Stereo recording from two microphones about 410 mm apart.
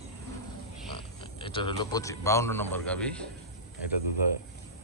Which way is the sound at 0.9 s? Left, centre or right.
Centre.